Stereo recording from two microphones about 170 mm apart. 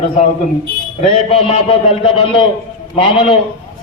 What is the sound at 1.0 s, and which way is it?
A man's voice, 35° left (ahead or behind).